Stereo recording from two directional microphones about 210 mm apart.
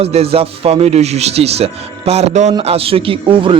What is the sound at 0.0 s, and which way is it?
Speech, 30° right (ahead or behind).